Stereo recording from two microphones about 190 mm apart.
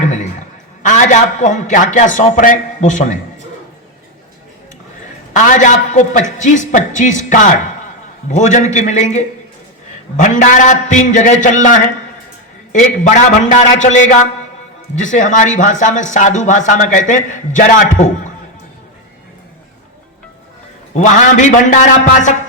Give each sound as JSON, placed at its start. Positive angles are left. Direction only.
{"t": 0.1, "sound": "a man's voice", "side_deg": 40}
{"t": 5.3, "sound": "speech", "side_deg": 40}
{"t": 13.1, "sound": "speech", "side_deg": 40}
{"t": 20.9, "sound": "speech", "side_deg": 40}